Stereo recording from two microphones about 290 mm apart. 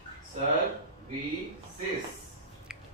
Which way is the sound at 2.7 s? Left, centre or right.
Centre.